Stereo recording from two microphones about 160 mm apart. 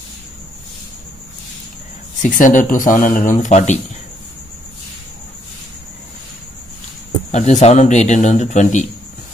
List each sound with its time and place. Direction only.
2.2 s speech: 55° left (ahead or behind)
7.2 s speech: 45° left (ahead or behind)